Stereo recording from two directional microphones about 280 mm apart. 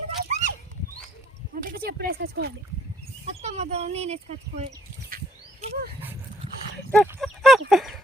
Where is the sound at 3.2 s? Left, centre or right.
Right.